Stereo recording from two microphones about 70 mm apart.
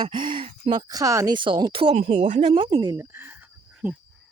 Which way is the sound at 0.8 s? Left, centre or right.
Right.